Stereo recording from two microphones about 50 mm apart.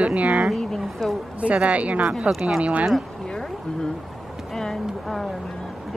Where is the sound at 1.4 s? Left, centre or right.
Right.